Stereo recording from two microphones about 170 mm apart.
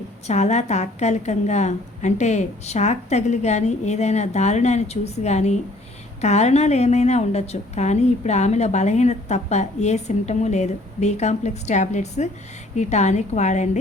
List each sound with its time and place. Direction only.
0.3 s a woman's voice: 40° left (ahead or behind)